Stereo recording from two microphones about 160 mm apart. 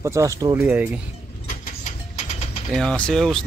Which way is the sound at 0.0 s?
20° right (ahead or behind).